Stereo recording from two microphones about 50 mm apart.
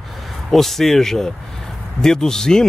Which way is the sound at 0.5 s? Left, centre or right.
Centre.